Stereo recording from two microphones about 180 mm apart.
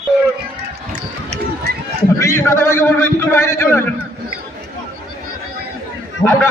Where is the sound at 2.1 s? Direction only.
15° left (ahead or behind).